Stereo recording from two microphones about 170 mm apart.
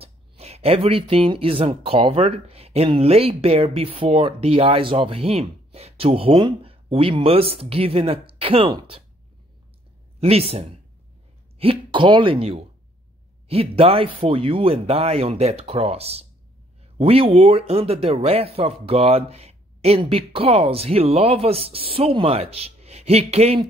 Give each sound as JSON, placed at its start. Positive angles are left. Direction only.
{"t": 0.0, "sound": "speech", "side_deg": -35}
{"t": 10.2, "sound": "speech", "side_deg": -35}